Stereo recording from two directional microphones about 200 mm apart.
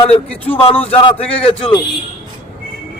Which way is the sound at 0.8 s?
30° left (ahead or behind).